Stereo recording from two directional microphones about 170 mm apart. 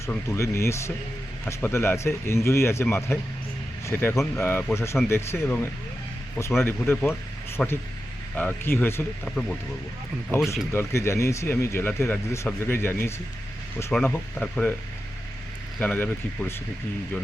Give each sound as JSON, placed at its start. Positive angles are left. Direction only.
{"t": 0.0, "sound": "speech", "side_deg": 15}
{"t": 10.3, "sound": "speech", "side_deg": 15}
{"t": 15.8, "sound": "speech", "side_deg": 10}